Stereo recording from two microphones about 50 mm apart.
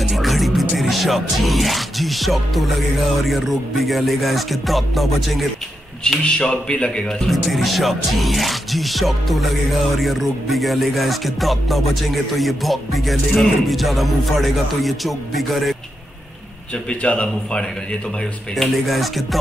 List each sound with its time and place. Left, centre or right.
0.1 s music: centre
3.3 s speech: centre
6.2 s speech: centre
7.2 s speech: centre
17.0 s speech: left
18.6 s speech: centre